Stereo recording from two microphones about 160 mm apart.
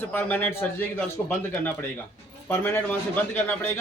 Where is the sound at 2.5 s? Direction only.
15° left (ahead or behind).